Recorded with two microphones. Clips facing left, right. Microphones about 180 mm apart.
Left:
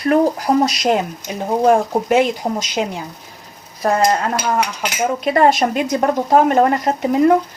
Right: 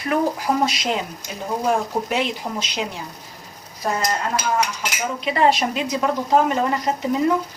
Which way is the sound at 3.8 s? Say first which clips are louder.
Left 7 dB; 65° left (ahead or behind).